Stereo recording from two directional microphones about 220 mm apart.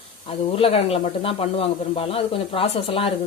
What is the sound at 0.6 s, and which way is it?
Speech, 25° left (ahead or behind).